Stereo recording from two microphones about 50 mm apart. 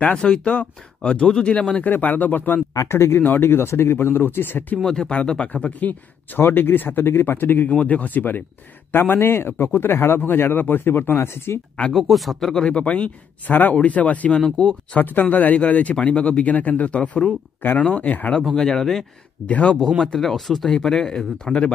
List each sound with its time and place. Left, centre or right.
0.0 s speech: left
1.9 s speech: left
2.8 s speech: left
3.2 s a man's voice: left
4.8 s speech: centre
5.5 s speech: left
6.4 s a man's voice: left
11.9 s speech: centre
12.6 s speech: left
14.6 s speech: centre
15.0 s speech: left
18.5 s speech: centre
19.4 s speech: left
20.1 s speech: centre